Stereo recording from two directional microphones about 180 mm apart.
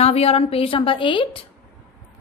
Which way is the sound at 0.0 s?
35° left (ahead or behind).